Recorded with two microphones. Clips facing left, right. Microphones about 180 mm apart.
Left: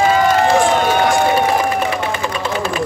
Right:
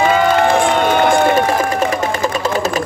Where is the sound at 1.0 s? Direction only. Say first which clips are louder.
Right 2 dB; 45° right (ahead or behind).